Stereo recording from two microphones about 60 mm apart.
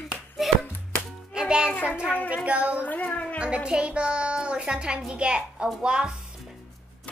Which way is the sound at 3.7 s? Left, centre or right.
Centre.